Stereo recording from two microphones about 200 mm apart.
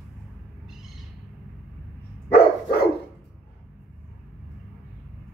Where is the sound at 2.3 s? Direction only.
50° left (ahead or behind).